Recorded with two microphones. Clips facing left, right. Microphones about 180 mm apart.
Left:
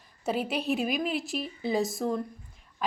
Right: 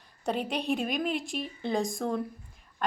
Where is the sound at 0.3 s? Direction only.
5° left (ahead or behind).